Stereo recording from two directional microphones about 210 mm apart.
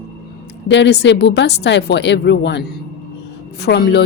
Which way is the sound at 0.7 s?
55° left (ahead or behind).